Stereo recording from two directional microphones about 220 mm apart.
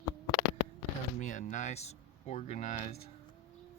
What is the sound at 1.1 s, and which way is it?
Speech, 35° left (ahead or behind).